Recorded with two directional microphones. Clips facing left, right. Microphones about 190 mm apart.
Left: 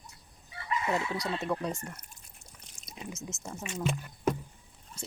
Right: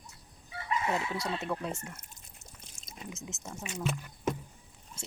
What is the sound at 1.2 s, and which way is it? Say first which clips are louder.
Speech: left 2 dB; 5° right (ahead or behind).